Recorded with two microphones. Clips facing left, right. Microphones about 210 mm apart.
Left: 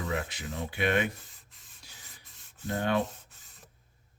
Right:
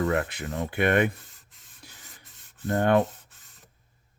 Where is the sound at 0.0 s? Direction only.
60° right (ahead or behind).